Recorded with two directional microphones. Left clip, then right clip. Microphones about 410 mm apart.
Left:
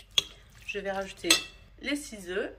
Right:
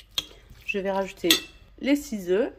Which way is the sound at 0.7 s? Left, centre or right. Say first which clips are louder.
Right 6 dB; centre.